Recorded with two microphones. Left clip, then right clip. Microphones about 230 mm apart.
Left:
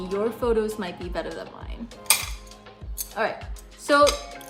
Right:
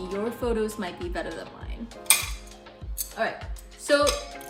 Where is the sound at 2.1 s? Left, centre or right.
Left.